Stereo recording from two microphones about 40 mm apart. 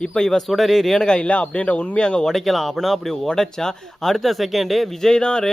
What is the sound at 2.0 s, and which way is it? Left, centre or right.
Speech, left.